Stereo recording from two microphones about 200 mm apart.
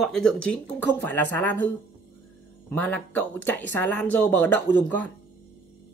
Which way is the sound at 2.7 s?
10° left (ahead or behind).